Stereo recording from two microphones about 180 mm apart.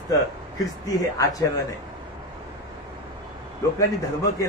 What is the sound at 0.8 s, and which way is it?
Speech, 20° left (ahead or behind).